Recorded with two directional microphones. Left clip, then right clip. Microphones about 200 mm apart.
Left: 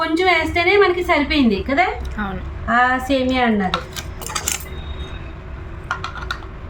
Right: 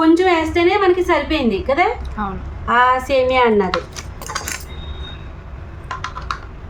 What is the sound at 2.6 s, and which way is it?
Speech, 30° right (ahead or behind).